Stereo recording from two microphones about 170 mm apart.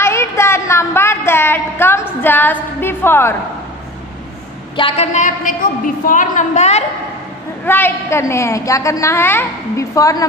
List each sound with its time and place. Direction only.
0.0 s a sound: 15° left (ahead or behind)
4.7 s a woman's voice: 30° left (ahead or behind)
5.1 s a woman's voice: 50° left (ahead or behind)
7.6 s a woman's voice: 10° left (ahead or behind)